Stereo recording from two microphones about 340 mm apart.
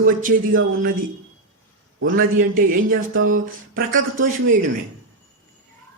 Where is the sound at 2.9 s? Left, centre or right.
Right.